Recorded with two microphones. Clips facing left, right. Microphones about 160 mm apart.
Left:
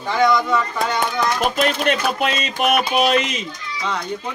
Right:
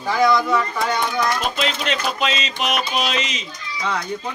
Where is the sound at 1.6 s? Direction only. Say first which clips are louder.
Left 4 dB; 55° left (ahead or behind).